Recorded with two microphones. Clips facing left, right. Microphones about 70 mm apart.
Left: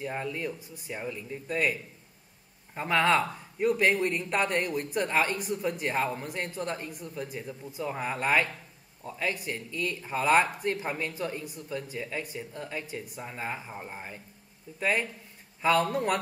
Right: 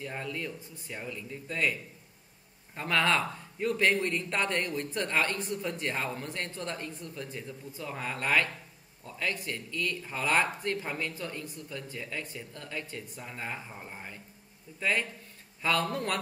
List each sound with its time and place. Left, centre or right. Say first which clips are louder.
0.0 s speech: left 4 dB; centre